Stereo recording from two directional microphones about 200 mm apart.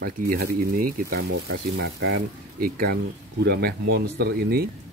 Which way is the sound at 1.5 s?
60° right (ahead or behind).